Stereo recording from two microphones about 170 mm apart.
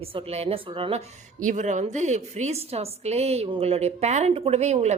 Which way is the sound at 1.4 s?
45° right (ahead or behind).